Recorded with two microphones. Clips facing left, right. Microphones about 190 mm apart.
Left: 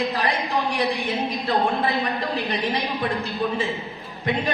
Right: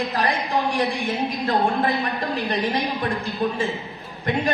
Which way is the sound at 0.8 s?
45° right (ahead or behind).